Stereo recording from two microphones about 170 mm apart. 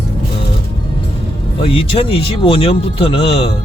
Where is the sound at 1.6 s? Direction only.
35° left (ahead or behind).